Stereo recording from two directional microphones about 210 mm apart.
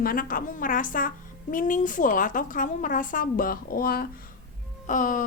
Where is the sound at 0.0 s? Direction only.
40° left (ahead or behind).